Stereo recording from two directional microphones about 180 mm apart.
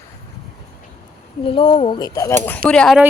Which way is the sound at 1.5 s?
30° left (ahead or behind).